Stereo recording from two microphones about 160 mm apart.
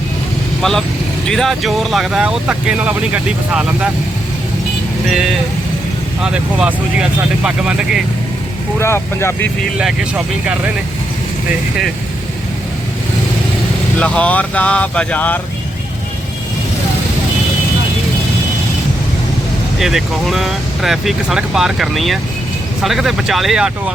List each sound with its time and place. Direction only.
0.6 s speech: centre (ahead or behind)
6.2 s speech: 5° right (ahead or behind)
8.8 s speech: 15° left (ahead or behind)
9.7 s speech: 5° right (ahead or behind)
14.0 s speech: 5° left (ahead or behind)
19.8 s speech: centre (ahead or behind)